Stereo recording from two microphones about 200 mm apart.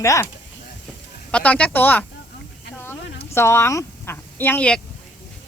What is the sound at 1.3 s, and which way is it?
Speech, 5° left (ahead or behind).